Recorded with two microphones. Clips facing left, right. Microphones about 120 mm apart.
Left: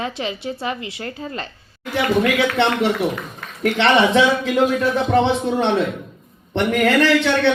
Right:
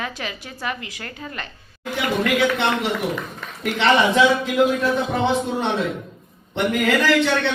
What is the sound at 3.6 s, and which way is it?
Speech, 70° left (ahead or behind).